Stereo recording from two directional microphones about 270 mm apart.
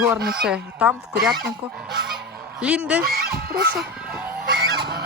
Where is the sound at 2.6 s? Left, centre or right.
Centre.